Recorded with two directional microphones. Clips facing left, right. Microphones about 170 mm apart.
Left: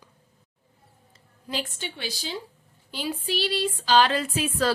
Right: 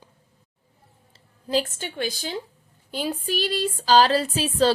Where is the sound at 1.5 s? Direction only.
40° right (ahead or behind).